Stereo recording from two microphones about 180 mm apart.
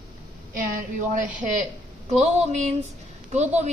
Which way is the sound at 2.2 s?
40° right (ahead or behind).